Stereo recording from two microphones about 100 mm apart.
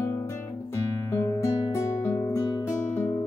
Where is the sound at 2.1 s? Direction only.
30° left (ahead or behind).